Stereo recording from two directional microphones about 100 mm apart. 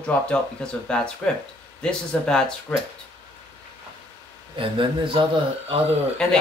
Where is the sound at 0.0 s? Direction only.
15° left (ahead or behind).